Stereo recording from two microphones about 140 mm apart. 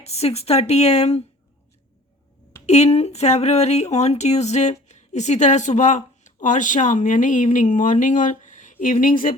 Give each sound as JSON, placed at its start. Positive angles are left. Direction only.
{"t": 0.0, "sound": "speech", "side_deg": 50}
{"t": 2.6, "sound": "speech", "side_deg": 50}